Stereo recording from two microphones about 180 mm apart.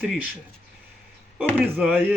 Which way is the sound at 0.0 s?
5° right (ahead or behind).